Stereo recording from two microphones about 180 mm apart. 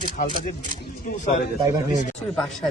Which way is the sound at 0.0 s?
50° left (ahead or behind).